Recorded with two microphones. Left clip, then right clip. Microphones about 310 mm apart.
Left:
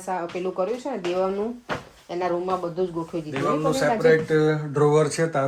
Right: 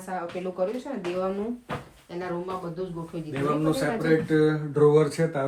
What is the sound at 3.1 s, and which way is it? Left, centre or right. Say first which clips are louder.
Speech: left 6 dB; centre.